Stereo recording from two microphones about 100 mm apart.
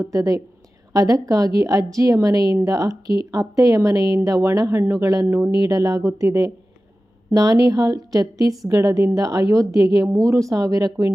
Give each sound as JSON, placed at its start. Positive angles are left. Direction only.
{"t": 0.0, "sound": "a woman's voice", "side_deg": -35}